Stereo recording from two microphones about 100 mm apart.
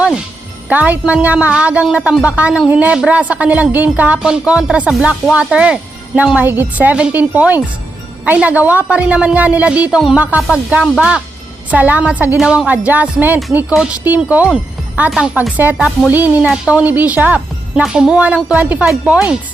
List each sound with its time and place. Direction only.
0.7 s a woman's voice: 15° right (ahead or behind)